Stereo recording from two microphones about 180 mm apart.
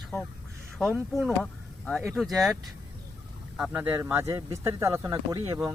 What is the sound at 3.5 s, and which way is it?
Speech, 5° right (ahead or behind).